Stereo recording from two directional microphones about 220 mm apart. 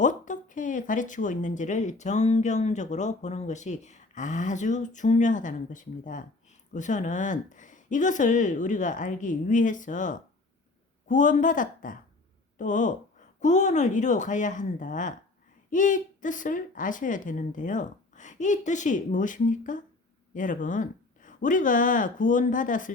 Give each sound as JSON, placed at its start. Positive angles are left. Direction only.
{"t": 0.0, "sound": "speech", "side_deg": 35}